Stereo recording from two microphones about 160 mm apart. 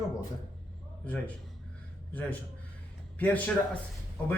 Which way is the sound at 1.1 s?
10° left (ahead or behind).